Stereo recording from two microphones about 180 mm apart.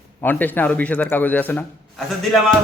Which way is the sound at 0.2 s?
10° left (ahead or behind).